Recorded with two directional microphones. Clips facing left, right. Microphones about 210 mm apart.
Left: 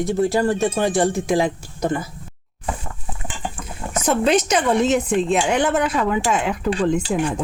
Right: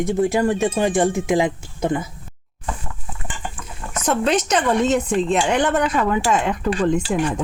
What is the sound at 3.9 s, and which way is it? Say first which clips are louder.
Speech: left 2 dB; 5° left (ahead or behind).